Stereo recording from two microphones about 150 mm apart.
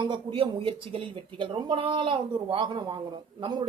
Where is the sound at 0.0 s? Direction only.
35° right (ahead or behind).